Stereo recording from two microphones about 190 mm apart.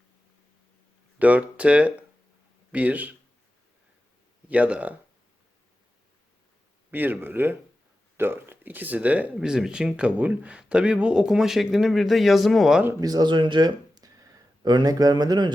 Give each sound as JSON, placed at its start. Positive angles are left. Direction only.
{"t": 1.2, "sound": "speech", "side_deg": -5}
{"t": 4.4, "sound": "speech", "side_deg": -10}
{"t": 6.9, "sound": "speech", "side_deg": -10}
{"t": 12.9, "sound": "speech", "side_deg": -20}